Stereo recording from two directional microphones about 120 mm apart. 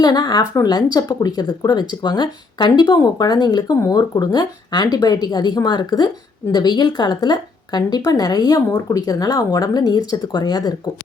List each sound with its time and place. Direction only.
0.0 s speech: 35° left (ahead or behind)